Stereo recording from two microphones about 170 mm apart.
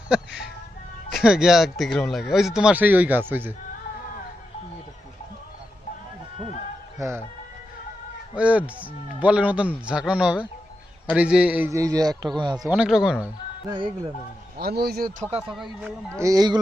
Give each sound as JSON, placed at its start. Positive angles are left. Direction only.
{"t": 0.1, "sound": "speech", "side_deg": -5}
{"t": 7.0, "sound": "speech", "side_deg": -20}
{"t": 8.4, "sound": "speech", "side_deg": -5}
{"t": 12.6, "sound": "speech", "side_deg": -5}
{"t": 13.7, "sound": "speech", "side_deg": -30}
{"t": 14.6, "sound": "speech", "side_deg": -70}
{"t": 15.4, "sound": "speech", "side_deg": -5}
{"t": 16.1, "sound": "speech", "side_deg": -20}